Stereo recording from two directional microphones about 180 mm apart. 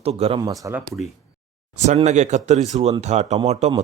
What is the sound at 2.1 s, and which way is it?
Speech, 40° right (ahead or behind).